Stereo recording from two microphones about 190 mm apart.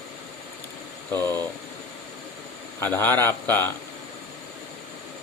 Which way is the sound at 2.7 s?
10° left (ahead or behind).